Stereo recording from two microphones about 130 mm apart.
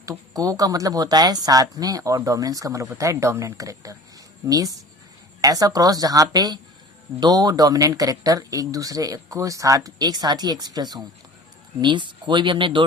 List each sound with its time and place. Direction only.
0.0 s speech: 25° right (ahead or behind)